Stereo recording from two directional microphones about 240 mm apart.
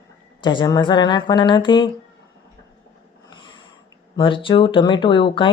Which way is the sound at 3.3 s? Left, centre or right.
Centre.